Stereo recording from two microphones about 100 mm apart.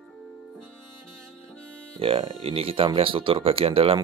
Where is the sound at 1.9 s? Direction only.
70° right (ahead or behind).